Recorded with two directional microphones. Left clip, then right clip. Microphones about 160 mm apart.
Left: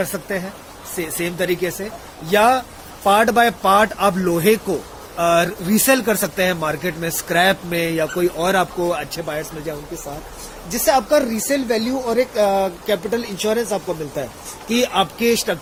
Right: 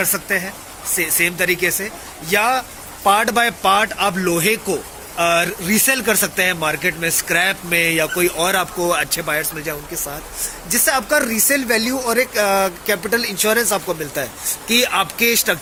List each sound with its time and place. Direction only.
0.1 s speech: 30° left (ahead or behind)